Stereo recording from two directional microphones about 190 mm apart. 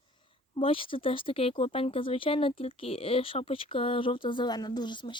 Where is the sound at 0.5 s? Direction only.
30° left (ahead or behind).